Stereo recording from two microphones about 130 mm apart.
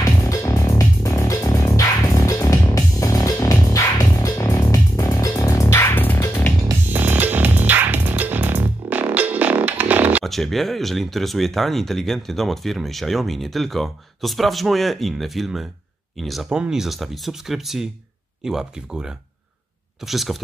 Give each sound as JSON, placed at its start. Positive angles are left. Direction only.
{"t": 0.0, "sound": "music", "side_deg": 25}
{"t": 6.9, "sound": "music", "side_deg": -15}
{"t": 10.2, "sound": "speech", "side_deg": 0}